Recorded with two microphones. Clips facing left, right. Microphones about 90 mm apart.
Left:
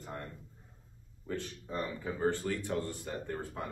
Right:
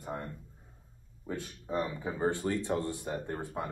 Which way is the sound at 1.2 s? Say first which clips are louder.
Even; 15° right (ahead or behind).